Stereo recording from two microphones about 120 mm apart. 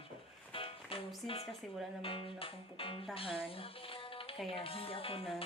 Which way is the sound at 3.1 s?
50° left (ahead or behind).